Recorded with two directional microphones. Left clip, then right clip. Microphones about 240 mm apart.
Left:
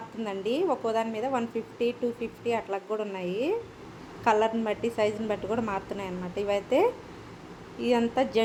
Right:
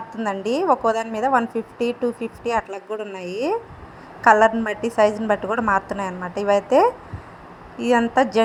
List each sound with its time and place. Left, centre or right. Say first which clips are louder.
0.2 s a woman's voice: right 6 dB; right